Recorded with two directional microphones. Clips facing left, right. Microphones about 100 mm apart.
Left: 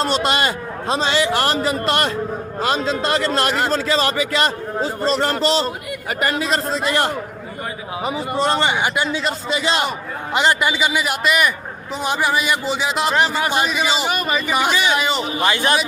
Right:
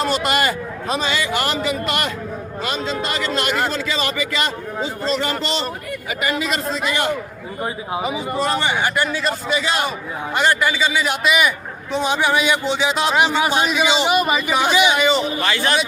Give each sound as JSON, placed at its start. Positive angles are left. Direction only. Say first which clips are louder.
{"t": 0.0, "sound": "a man's voice", "louder": "even", "side_deg": 30}
{"t": 8.3, "sound": "a man's voice", "louder": "left 3 dB", "side_deg": 25}
{"t": 8.7, "sound": "a man's voice", "louder": "even", "side_deg": 15}
{"t": 11.0, "sound": "speech", "louder": "even", "side_deg": 0}
{"t": 14.1, "sound": "a man's voice", "louder": "right 3 dB", "side_deg": -10}
{"t": 14.9, "sound": "speech", "louder": "right 3 dB", "side_deg": 0}
{"t": 15.4, "sound": "a man's voice", "louder": "left 2 dB", "side_deg": 15}